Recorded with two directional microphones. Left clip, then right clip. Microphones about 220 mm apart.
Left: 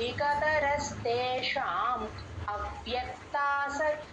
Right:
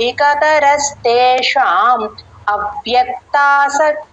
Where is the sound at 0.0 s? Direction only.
45° right (ahead or behind).